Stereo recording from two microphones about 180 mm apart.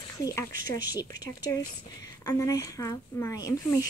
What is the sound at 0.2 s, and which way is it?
Speech, 20° left (ahead or behind).